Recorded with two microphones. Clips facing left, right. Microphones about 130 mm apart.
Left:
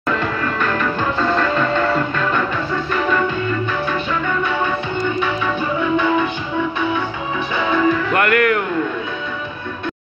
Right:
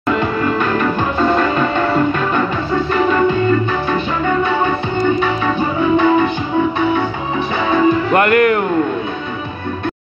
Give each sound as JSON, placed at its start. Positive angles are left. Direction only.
{"t": 0.1, "sound": "music", "side_deg": -20}
{"t": 4.9, "sound": "music", "side_deg": -35}
{"t": 7.7, "sound": "music", "side_deg": -25}